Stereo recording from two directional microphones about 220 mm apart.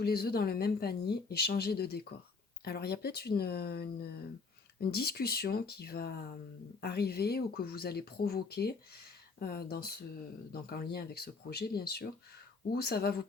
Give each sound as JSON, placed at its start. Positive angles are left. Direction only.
{"t": 0.0, "sound": "speech", "side_deg": 45}